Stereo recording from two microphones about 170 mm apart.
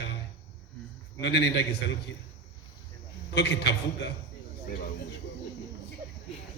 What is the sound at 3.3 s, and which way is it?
Speech, 80° left.